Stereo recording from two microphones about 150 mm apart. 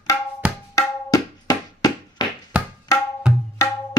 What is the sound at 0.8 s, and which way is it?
Music, 25° left (ahead or behind).